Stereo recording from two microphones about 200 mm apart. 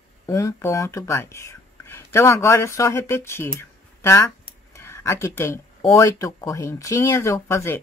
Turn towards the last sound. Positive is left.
turn(degrees=15)  # may be behind; listen again after turning